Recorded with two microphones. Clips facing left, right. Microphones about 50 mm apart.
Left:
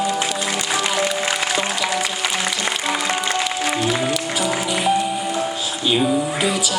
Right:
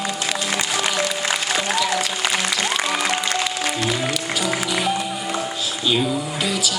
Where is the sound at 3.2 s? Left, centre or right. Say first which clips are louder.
Left 2 dB; left.